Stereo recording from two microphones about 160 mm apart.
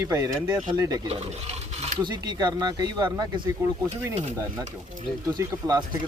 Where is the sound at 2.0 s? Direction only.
25° right (ahead or behind).